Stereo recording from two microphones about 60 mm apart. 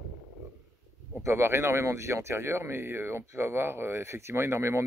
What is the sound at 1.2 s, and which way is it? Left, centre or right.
Speech, right.